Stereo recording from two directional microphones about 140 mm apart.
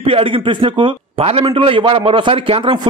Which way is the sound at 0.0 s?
40° right (ahead or behind).